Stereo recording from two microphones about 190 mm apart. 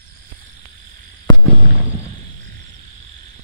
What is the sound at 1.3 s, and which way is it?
Fireworks, 20° left (ahead or behind).